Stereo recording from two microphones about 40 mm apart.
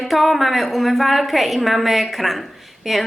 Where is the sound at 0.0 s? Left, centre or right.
Centre.